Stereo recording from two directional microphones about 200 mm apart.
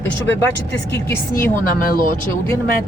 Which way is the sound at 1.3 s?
45° left (ahead or behind).